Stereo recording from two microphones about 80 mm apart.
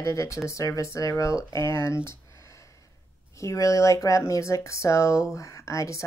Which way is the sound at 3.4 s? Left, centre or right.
Left.